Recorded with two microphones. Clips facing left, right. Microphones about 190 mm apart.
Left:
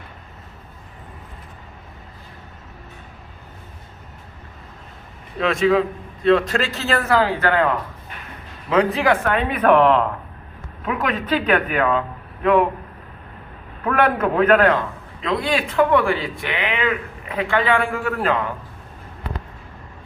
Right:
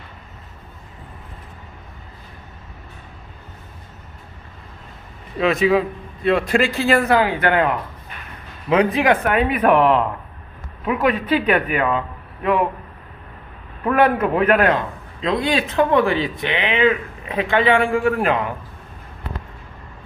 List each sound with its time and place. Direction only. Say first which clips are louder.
5.4 s a man's voice: right 1 dB; 5° right (ahead or behind)
13.8 s a man's voice: right 2 dB; 10° right (ahead or behind)
15.2 s speech: right 2 dB; 20° right (ahead or behind)